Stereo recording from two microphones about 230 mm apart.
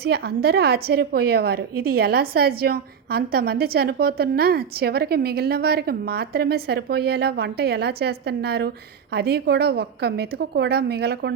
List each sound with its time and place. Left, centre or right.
0.0 s a woman's voice: right